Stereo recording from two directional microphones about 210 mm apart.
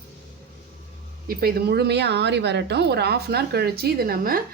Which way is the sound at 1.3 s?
45° right (ahead or behind).